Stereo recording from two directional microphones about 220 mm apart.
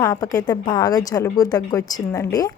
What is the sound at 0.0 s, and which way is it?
Speech, 15° left (ahead or behind).